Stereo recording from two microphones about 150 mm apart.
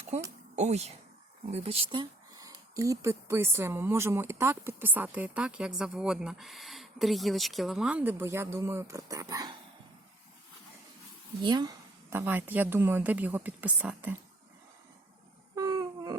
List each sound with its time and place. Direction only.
0.1 s speech: 45° right (ahead or behind); by 9.6 s 25° right (ahead or behind)
11.4 s speech: 30° right (ahead or behind)
12.1 s speech: 15° right (ahead or behind)
15.5 s dog: 25° right (ahead or behind)